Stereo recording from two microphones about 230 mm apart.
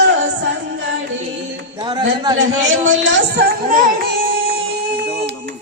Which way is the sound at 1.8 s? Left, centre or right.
Centre.